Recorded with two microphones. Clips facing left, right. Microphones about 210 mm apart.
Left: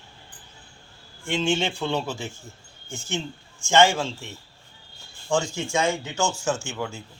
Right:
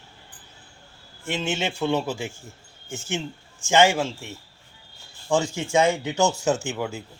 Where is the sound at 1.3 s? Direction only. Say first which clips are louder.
Left 3 dB; 5° right (ahead or behind).